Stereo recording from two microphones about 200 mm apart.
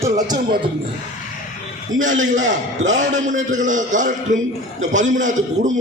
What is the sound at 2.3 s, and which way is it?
A man's voice, 40° right (ahead or behind).